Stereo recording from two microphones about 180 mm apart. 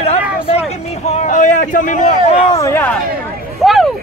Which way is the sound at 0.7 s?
35° left (ahead or behind).